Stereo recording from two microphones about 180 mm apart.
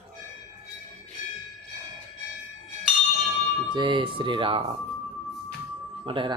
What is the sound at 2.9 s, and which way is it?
Bell, 5° right (ahead or behind).